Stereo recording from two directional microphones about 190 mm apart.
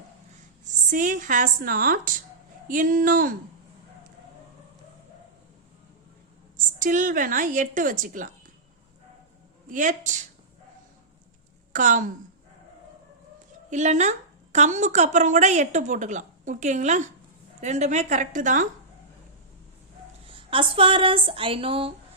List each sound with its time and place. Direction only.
0.6 s a woman's voice: 45° right (ahead or behind)
6.7 s a woman's voice: 45° right (ahead or behind)
9.7 s a woman's voice: 40° right (ahead or behind)
11.7 s a woman's voice: 40° right (ahead or behind)
13.7 s a woman's voice: 40° right (ahead or behind)
20.2 s speech: 25° right (ahead or behind)